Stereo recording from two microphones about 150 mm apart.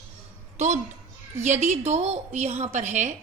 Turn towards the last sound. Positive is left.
turn(degrees=-55)  # may be behind; listen again after turning